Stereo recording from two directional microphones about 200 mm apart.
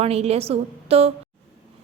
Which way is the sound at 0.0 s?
30° right (ahead or behind).